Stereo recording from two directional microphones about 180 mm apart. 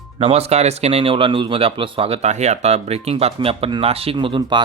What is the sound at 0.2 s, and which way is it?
Speech, 35° right (ahead or behind).